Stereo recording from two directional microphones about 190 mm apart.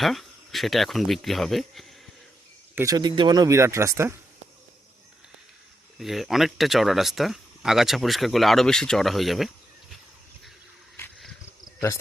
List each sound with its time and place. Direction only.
0.0 s speech: centre (ahead or behind)
2.7 s speech: 20° right (ahead or behind)
6.0 s speech: centre (ahead or behind)